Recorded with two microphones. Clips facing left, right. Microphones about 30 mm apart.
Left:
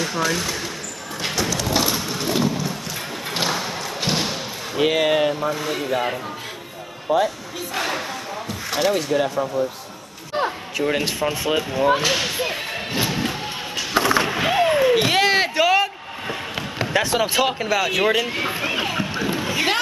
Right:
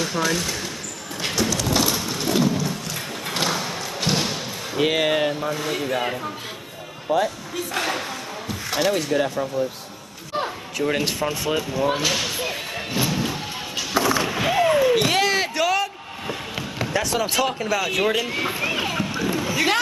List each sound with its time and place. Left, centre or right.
0.0 s speech: centre
1.2 s a sound: centre
7.1 s speech: centre
10.8 s speech: centre
13.9 s skateboard: left
14.3 s a sound: centre
14.6 s slam: left
14.9 s a sound: centre
16.9 s speech: left
17.6 s speech: centre
19.2 s rowboat: centre